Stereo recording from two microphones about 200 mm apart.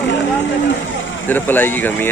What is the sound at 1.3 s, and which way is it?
Speech, 10° left (ahead or behind).